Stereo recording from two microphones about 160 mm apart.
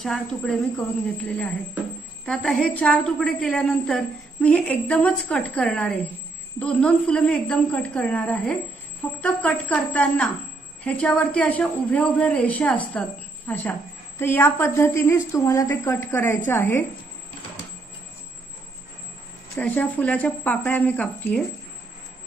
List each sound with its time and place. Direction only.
0.0 s a woman's voice: centre (ahead or behind)
19.5 s a woman's voice: 10° left (ahead or behind)